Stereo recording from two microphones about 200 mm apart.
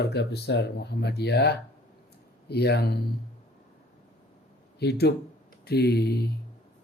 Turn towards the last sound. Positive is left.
turn(degrees=55)  # may be behind; listen again after turning